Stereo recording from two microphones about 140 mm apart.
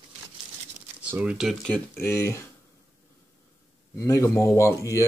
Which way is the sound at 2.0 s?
20° left (ahead or behind).